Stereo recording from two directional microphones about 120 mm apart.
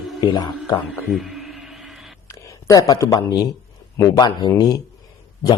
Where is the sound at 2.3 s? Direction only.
30° left (ahead or behind).